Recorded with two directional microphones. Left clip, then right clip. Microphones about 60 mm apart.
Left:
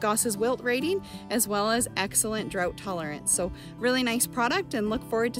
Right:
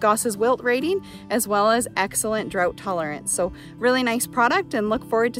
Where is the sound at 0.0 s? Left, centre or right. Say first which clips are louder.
Right 7 dB; right.